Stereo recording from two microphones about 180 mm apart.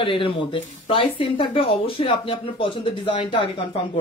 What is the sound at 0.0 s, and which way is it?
Speech, 30° left (ahead or behind).